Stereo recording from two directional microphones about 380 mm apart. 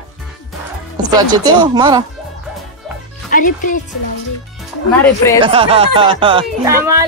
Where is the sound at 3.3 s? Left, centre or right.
Left.